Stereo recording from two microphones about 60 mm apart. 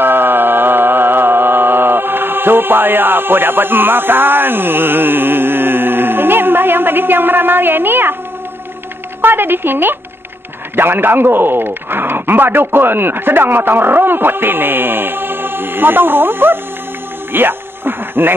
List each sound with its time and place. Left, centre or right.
0.0 s music: right
9.2 s speech: right
17.3 s a sound: right